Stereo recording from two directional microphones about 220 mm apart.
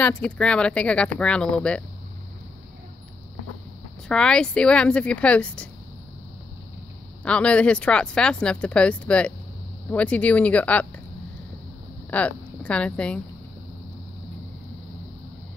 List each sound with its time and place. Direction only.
0.0 s speech: 5° left (ahead or behind)
4.1 s speech: 5° left (ahead or behind)
7.2 s speech: 5° left (ahead or behind)
12.1 s speech: 5° left (ahead or behind)